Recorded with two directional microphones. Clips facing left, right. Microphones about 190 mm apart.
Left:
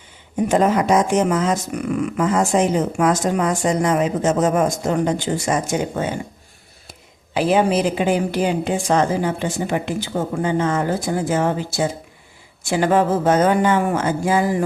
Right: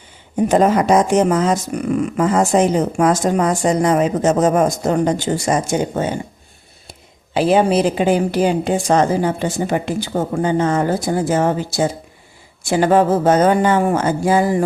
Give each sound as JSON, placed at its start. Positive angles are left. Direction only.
{"t": 0.4, "sound": "speech", "side_deg": -35}
{"t": 7.3, "sound": "speech", "side_deg": -30}